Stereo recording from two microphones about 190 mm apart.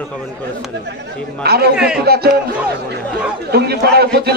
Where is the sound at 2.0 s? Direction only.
55° right (ahead or behind).